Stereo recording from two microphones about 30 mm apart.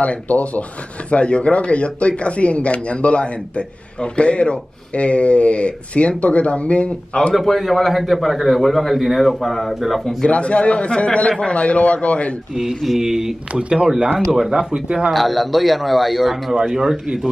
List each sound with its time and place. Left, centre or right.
0.0 s speech: left
1.1 s speech: left
7.3 s a man's voice: centre
10.3 s speech: left
13.0 s speech: centre
13.5 s speech: right
14.3 s speech: centre
15.1 s a man's voice: centre
16.7 s speech: centre